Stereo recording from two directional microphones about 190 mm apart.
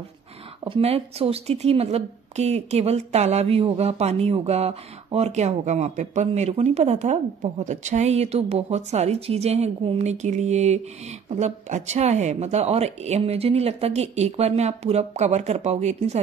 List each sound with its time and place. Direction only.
0.7 s a woman's voice: 30° right (ahead or behind)